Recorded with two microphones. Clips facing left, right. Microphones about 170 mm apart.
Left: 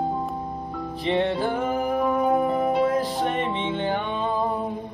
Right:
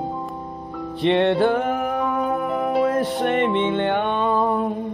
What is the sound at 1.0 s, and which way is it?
Music, 65° right (ahead or behind).